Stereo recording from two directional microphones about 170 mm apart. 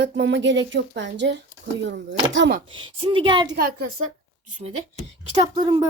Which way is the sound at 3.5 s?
60° right (ahead or behind).